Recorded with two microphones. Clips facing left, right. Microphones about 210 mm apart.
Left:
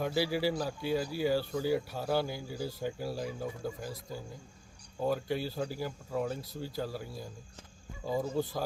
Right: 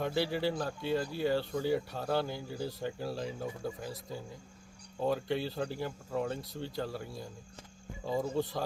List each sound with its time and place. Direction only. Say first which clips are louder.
0.0 s speech: left 1 dB; 5° left (ahead or behind)